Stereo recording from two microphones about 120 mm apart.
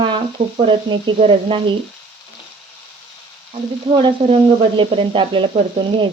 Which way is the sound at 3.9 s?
50° right (ahead or behind).